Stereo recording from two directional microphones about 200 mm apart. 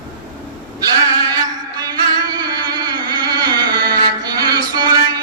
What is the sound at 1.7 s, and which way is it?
Music, 20° right (ahead or behind).